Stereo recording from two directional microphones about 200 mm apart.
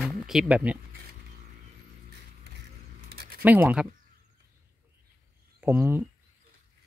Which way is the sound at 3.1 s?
50° right (ahead or behind).